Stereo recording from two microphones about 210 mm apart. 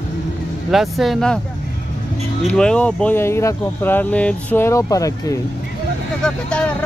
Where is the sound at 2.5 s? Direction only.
5° left (ahead or behind).